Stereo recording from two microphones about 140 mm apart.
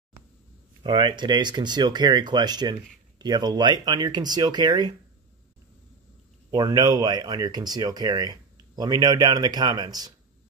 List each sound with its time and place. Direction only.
0.8 s speech: 35° right (ahead or behind)
6.5 s speech: 30° right (ahead or behind)